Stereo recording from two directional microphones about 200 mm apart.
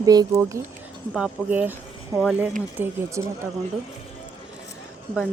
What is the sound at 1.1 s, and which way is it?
Speech, 5° right (ahead or behind).